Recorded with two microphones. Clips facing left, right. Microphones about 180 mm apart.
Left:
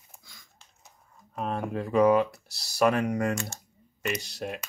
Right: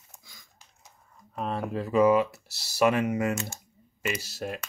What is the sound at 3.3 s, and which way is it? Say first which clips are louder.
Speech: even; 20° right (ahead or behind).